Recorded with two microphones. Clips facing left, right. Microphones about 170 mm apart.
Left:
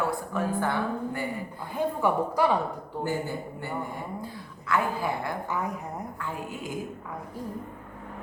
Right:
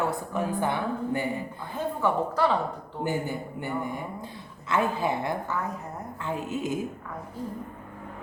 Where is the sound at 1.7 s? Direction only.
15° left (ahead or behind).